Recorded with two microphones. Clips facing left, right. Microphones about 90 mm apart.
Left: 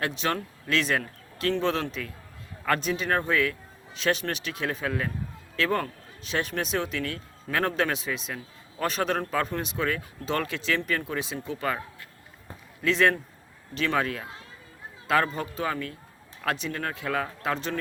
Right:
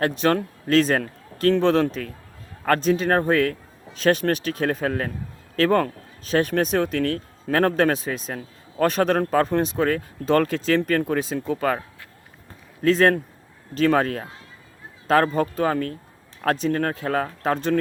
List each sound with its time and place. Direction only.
0.0 s speech: 45° right (ahead or behind)
12.8 s speech: 40° right (ahead or behind)